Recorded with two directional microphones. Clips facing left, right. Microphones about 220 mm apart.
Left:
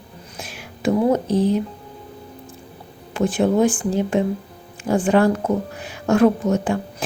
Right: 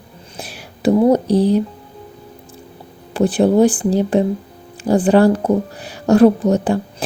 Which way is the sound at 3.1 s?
35° right (ahead or behind).